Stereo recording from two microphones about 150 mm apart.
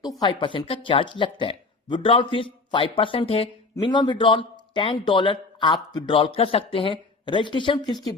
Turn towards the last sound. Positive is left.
turn(degrees=30)  # may be behind; listen again after turning